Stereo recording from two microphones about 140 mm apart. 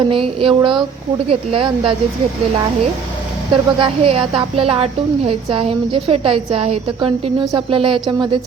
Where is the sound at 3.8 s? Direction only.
40° right (ahead or behind).